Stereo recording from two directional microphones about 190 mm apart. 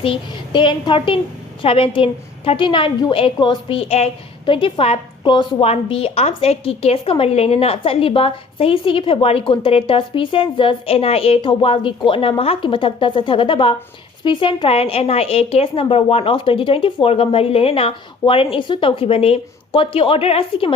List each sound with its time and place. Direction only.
0.0 s a woman's voice: 30° left (ahead or behind)